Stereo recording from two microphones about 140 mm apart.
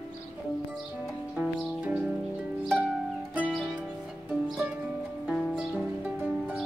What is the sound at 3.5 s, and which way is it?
Music, 5° right (ahead or behind).